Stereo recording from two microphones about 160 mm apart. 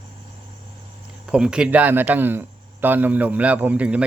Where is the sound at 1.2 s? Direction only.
5° right (ahead or behind).